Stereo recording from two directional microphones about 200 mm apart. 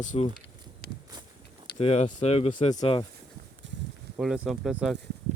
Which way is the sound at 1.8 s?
35° left (ahead or behind).